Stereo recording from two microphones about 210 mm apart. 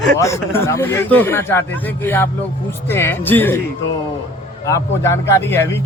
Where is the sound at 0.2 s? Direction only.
15° left (ahead or behind).